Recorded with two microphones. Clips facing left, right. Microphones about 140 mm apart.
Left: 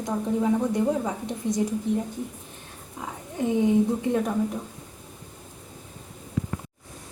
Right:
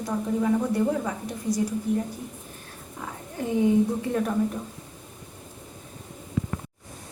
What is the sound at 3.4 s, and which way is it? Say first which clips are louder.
Speech: even; 20° left (ahead or behind).